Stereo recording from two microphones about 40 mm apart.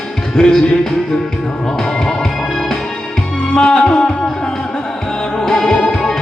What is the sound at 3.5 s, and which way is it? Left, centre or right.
Music, left.